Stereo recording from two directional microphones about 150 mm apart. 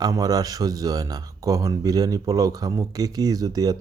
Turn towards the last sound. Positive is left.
turn(degrees=-25)  # may be behind; listen again after turning